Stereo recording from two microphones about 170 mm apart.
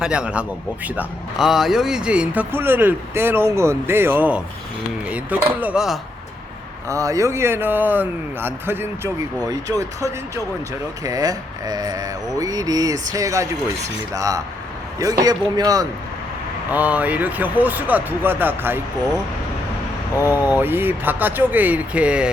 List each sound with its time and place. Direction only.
0.0 s a man's voice: 5° right (ahead or behind)
6.8 s speech: 20° right (ahead or behind)
11.0 s mantra: 20° right (ahead or behind)
16.7 s speech: 10° right (ahead or behind)
20.2 s speech: 10° right (ahead or behind)